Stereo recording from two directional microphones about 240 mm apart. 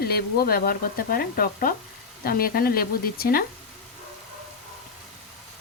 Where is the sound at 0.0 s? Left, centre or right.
Left.